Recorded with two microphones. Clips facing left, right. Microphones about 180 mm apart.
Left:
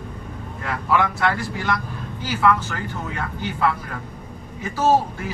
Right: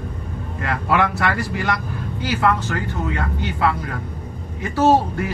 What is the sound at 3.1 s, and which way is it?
Speech, 70° right (ahead or behind).